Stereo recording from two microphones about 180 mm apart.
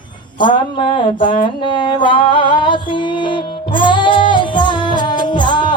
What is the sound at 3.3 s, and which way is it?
Music, 25° left (ahead or behind).